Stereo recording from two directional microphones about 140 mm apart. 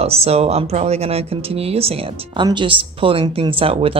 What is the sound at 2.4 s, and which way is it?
Speech, 35° right (ahead or behind).